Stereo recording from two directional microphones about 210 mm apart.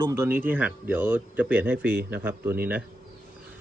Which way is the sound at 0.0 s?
10° right (ahead or behind).